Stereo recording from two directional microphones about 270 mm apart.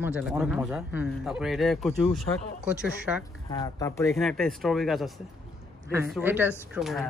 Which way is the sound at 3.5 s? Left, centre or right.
Centre.